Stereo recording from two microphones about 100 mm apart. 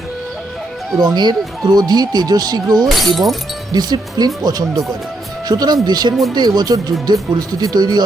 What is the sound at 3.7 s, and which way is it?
Speech, 45° right (ahead or behind).